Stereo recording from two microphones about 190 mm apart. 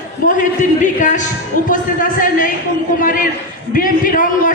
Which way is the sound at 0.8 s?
40° left (ahead or behind).